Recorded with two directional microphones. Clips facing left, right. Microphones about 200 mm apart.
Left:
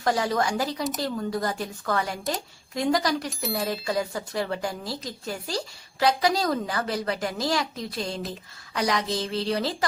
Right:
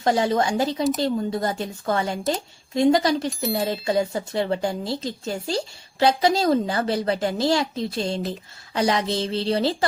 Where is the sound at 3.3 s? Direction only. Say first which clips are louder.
Right 5 dB; centre (ahead or behind).